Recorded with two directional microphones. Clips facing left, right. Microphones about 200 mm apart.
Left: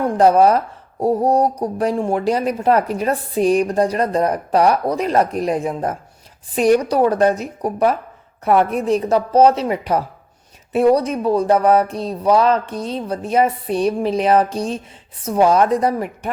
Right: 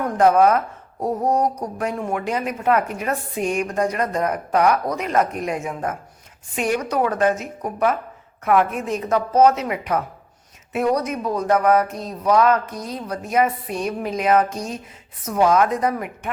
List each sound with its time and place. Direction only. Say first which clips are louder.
0.0 s speech: left 3 dB; 30° left (ahead or behind)